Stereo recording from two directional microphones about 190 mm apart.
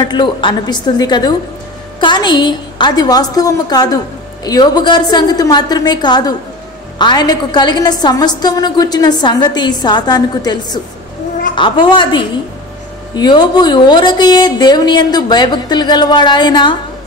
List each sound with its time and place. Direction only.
0.0 s a woman's voice: 25° left (ahead or behind)